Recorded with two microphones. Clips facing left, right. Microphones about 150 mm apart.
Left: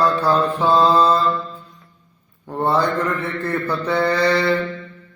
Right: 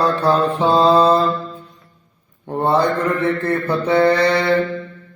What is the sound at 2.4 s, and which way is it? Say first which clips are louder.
Mantra: right 2 dB; 20° right (ahead or behind).